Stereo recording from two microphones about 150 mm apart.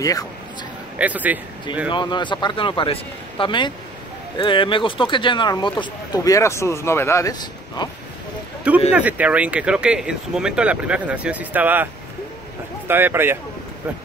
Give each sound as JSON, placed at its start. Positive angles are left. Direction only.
{"t": 0.9, "sound": "speech", "side_deg": -10}
{"t": 1.9, "sound": "a man's voice", "side_deg": 30}
{"t": 8.9, "sound": "speech", "side_deg": -10}